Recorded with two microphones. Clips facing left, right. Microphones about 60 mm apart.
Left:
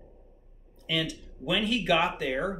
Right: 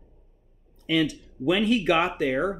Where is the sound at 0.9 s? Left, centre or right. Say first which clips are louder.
Right 7 dB; right.